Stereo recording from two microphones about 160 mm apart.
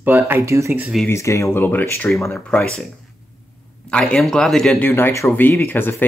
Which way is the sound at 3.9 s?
5° left (ahead or behind).